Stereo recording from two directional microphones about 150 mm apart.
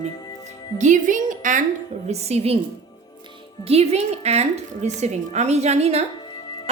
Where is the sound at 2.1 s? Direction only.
45° right (ahead or behind).